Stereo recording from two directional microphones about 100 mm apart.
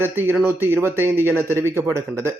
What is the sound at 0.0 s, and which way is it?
A man's voice, 20° right (ahead or behind).